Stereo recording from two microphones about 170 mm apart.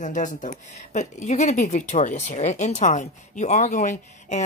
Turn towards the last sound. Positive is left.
turn(degrees=45)  # may be behind; listen again after turning